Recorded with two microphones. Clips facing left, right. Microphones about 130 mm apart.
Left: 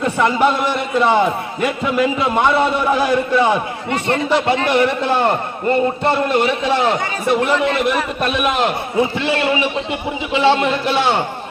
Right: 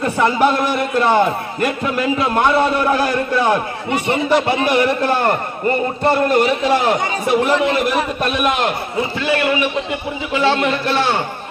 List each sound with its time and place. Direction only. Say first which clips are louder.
0.0 s a man's voice: even; centre (ahead or behind)
3.8 s a man's voice: right 1 dB; 10° right (ahead or behind)
9.1 s a man's voice: even; 25° left (ahead or behind)